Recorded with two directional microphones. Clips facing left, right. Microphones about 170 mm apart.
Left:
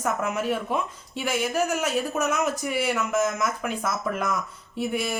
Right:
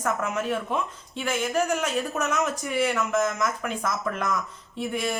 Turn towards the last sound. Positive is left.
turn(degrees=5)  # may be behind; listen again after turning